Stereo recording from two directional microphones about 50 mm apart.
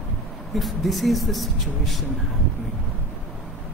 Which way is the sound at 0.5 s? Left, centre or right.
Centre.